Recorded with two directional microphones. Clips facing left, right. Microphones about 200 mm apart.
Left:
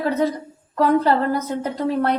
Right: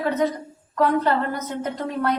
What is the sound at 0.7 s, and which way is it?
A woman's voice, 35° left (ahead or behind).